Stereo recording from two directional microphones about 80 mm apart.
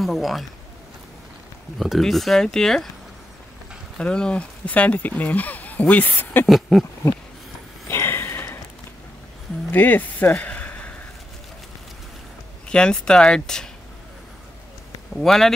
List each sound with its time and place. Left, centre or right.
0.0 s speech: centre
1.8 s speech: centre
4.0 s speech: centre
6.4 s speech: centre
7.9 s a sound: left
9.7 s speech: left
12.6 s speech: centre
15.1 s speech: centre